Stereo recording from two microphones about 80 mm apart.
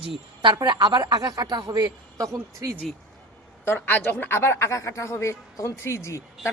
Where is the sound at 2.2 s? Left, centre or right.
Right.